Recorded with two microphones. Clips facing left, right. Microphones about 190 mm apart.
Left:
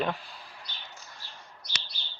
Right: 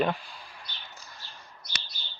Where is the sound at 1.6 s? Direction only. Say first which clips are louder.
Right 1 dB; 50° right (ahead or behind).